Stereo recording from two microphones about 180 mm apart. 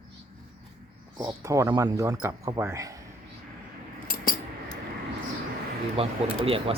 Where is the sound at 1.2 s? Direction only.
15° right (ahead or behind).